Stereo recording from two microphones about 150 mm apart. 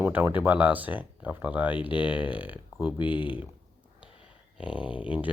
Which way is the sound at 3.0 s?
30° left (ahead or behind).